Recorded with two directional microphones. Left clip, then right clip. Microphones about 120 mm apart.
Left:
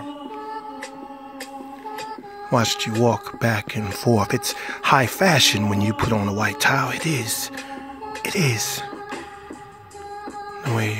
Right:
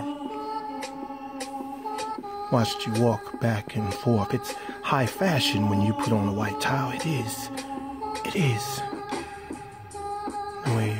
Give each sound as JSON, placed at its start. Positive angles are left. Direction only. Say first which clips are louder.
{"t": 2.5, "sound": "speech", "louder": "left 5 dB", "side_deg": 20}
{"t": 8.2, "sound": "music", "louder": "left 7 dB", "side_deg": 20}
{"t": 10.6, "sound": "music", "louder": "left 6 dB", "side_deg": 20}